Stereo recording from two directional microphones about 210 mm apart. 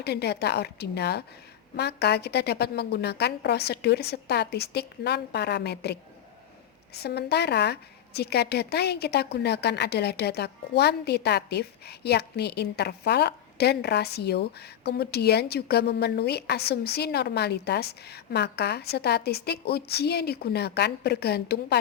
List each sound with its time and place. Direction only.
0.0 s a woman's voice: 50° left (ahead or behind)